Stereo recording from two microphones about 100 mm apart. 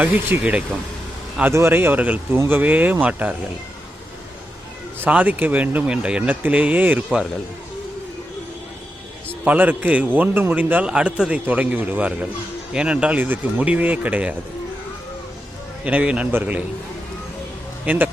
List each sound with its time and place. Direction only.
0.0 s a man's voice: 15° right (ahead or behind)
4.9 s a man's voice: 15° right (ahead or behind)
9.4 s a man's voice: 15° right (ahead or behind)
15.8 s a man's voice: 10° right (ahead or behind)
17.8 s speech: 20° right (ahead or behind)